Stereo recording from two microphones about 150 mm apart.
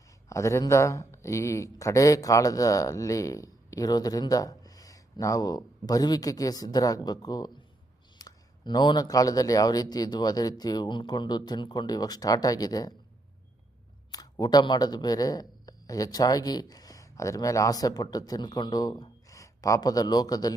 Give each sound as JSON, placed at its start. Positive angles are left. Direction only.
{"t": 0.3, "sound": "speech", "side_deg": 20}
{"t": 14.1, "sound": "speech", "side_deg": 25}